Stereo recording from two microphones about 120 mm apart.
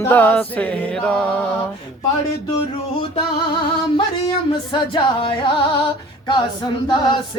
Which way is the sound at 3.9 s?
45° left (ahead or behind).